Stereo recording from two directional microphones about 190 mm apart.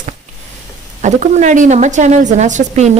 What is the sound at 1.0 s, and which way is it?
Speech, 40° right (ahead or behind).